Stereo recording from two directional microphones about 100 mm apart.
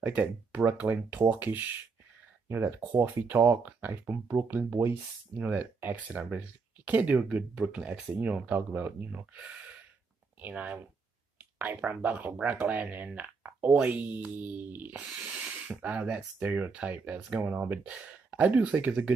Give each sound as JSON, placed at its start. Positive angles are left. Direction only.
{"t": 0.0, "sound": "speech", "side_deg": -15}
{"t": 10.4, "sound": "speech", "side_deg": -15}